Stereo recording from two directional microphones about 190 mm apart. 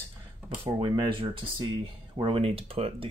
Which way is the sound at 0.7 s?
25° right (ahead or behind).